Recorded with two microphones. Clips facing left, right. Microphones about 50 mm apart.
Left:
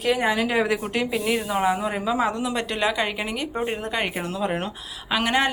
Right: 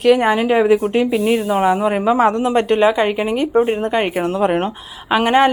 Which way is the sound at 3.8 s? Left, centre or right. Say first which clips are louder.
Right 9 dB; right.